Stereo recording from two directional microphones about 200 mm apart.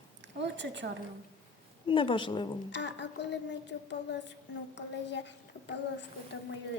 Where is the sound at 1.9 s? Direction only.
25° left (ahead or behind).